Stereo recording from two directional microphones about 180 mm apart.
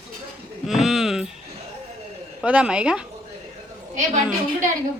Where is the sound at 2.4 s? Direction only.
5° right (ahead or behind).